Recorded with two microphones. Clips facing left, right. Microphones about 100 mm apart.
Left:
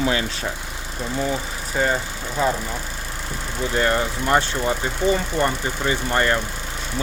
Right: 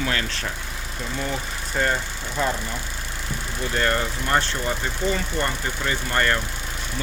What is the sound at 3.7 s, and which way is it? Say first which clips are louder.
Speech: left 3 dB; 15° left (ahead or behind).